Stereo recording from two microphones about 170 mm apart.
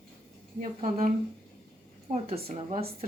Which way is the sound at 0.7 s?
35° right (ahead or behind).